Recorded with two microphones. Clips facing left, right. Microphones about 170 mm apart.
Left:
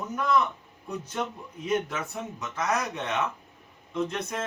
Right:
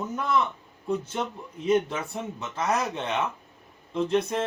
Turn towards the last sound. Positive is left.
turn(degrees=-30)  # may be behind; listen again after turning